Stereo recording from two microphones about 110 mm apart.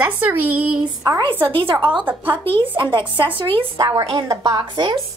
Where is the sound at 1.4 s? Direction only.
50° right (ahead or behind).